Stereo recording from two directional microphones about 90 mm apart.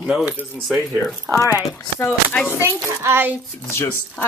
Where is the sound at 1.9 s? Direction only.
20° left (ahead or behind).